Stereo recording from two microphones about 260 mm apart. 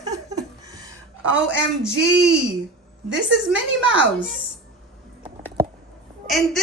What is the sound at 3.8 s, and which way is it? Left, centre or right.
Speech, right.